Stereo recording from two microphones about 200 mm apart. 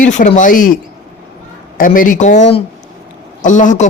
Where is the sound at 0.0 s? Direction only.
40° left (ahead or behind).